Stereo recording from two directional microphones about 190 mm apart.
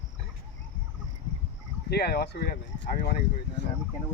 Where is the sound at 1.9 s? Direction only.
60° left (ahead or behind).